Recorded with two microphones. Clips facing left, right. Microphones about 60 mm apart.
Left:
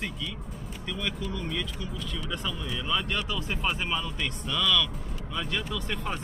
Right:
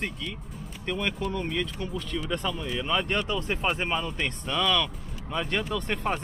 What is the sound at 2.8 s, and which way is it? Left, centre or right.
Speech, right.